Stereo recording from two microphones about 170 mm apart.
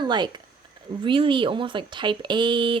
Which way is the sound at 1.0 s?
30° right (ahead or behind).